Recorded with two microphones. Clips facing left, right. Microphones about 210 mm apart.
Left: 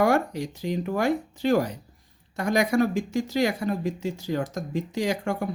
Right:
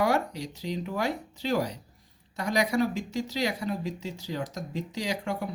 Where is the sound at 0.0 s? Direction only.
50° left (ahead or behind).